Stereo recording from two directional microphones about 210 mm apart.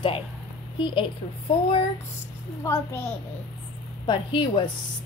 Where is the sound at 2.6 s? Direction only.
10° left (ahead or behind).